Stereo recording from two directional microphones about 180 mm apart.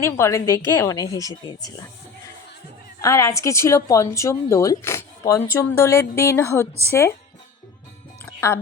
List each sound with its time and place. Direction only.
0.0 s a woman's voice: 15° left (ahead or behind)
3.0 s a woman's voice: 15° left (ahead or behind)
8.2 s music: 15° left (ahead or behind)